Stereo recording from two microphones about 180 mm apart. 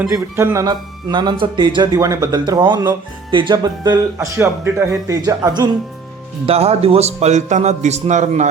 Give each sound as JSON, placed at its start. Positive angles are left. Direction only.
{"t": 0.1, "sound": "speech", "side_deg": -15}
{"t": 6.4, "sound": "a man's voice", "side_deg": -35}